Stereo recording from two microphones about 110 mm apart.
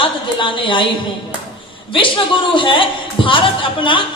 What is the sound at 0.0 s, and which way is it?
Speech, 45° left (ahead or behind).